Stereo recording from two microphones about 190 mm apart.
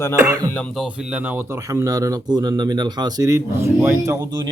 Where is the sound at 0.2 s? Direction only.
15° right (ahead or behind).